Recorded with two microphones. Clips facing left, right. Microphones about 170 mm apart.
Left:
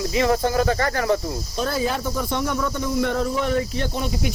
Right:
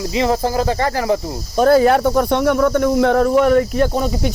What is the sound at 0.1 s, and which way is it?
Speech, 25° right (ahead or behind).